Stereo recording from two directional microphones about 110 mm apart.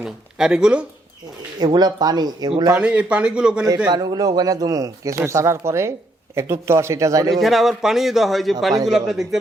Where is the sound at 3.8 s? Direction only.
40° right (ahead or behind).